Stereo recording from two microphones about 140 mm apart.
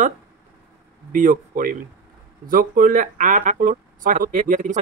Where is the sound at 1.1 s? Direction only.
75° right (ahead or behind).